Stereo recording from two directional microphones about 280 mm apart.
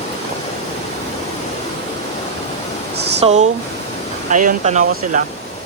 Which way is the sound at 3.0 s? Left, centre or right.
Right.